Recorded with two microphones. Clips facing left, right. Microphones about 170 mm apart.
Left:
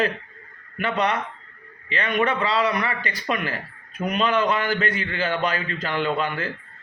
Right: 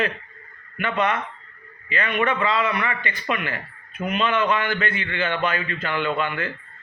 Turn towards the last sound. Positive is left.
turn(degrees=35)  # may be behind; listen again after turning